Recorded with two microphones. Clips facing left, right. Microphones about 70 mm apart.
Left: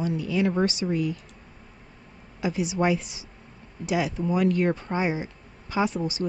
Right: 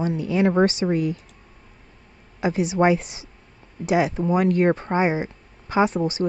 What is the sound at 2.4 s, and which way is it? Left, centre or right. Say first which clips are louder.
Speech: right 5 dB; right.